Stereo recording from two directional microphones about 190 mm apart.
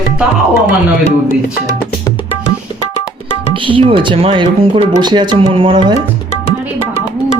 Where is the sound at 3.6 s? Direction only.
25° right (ahead or behind).